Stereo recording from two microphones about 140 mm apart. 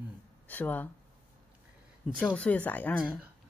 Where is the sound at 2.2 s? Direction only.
10° left (ahead or behind).